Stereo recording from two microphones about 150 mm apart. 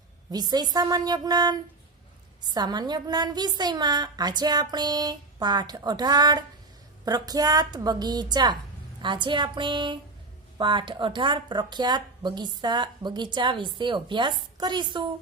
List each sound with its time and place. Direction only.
0.3 s a woman's voice: 25° right (ahead or behind)